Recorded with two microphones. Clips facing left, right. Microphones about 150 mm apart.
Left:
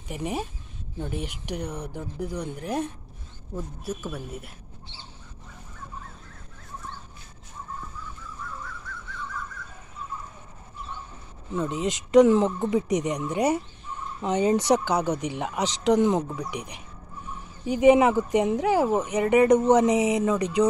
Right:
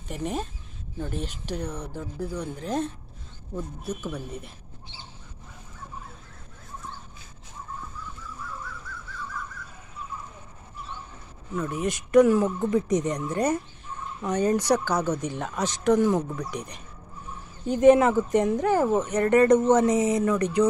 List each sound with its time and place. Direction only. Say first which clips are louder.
0.1 s a woman's voice: even; 10° left (ahead or behind)
11.5 s speech: left 1 dB; 20° left (ahead or behind)